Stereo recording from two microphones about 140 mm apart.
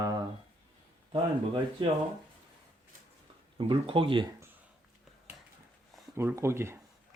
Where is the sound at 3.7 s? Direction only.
40° right (ahead or behind).